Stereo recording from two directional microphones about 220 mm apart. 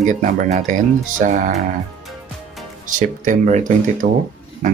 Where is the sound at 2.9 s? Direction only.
35° right (ahead or behind).